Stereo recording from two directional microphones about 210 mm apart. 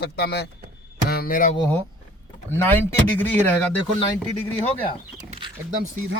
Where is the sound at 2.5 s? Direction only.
10° left (ahead or behind).